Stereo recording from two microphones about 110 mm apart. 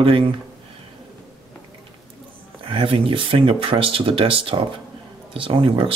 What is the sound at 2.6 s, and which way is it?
Speech, 55° right (ahead or behind).